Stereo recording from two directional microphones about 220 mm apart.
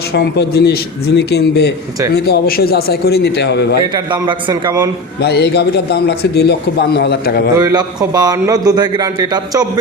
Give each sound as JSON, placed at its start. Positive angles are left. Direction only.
{"t": 0.1, "sound": "a man's voice", "side_deg": 45}
{"t": 3.9, "sound": "a man's voice", "side_deg": -20}
{"t": 5.2, "sound": "a man's voice", "side_deg": 50}
{"t": 7.6, "sound": "a man's voice", "side_deg": -15}